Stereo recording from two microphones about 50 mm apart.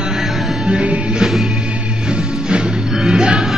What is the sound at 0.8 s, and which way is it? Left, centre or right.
Music, right.